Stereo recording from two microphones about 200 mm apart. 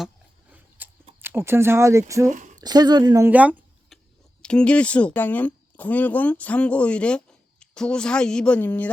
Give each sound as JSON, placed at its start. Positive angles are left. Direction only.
{"t": 0.8, "sound": "a sound", "side_deg": -10}
{"t": 1.2, "sound": "speech", "side_deg": -10}
{"t": 2.2, "sound": "speech", "side_deg": -40}
{"t": 2.6, "sound": "speech", "side_deg": -20}
{"t": 4.4, "sound": "speech", "side_deg": 5}